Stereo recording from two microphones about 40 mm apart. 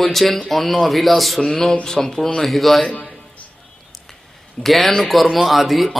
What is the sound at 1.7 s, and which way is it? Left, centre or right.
Speech, centre.